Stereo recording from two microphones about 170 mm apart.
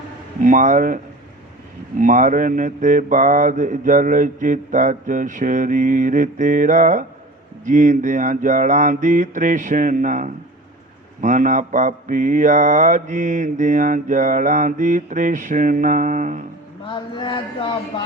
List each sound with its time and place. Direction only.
0.4 s mantra: 50° right (ahead or behind)
2.0 s mantra: 50° right (ahead or behind)
16.8 s speech: 30° left (ahead or behind)